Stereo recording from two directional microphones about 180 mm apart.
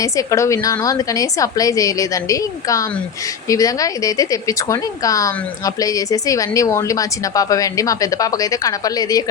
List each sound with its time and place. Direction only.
0.0 s a woman's voice: 20° left (ahead or behind)